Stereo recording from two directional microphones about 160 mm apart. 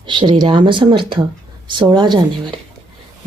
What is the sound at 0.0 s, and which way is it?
Speech, 30° right (ahead or behind).